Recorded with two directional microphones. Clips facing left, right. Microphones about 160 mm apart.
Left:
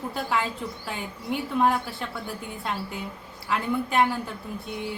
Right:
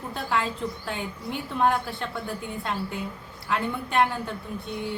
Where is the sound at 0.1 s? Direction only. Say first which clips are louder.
Right 2 dB; centre (ahead or behind).